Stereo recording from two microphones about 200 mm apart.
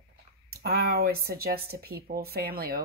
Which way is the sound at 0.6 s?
50° right (ahead or behind).